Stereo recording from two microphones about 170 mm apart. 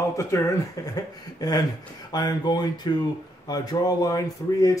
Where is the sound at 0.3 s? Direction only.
15° left (ahead or behind).